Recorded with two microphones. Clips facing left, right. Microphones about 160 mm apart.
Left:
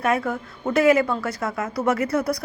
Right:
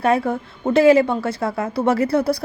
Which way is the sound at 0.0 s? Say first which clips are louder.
Right 4 dB; 30° right (ahead or behind).